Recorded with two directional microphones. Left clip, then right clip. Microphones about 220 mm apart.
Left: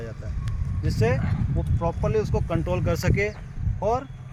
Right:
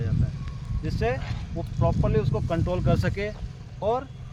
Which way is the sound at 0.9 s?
55° left (ahead or behind).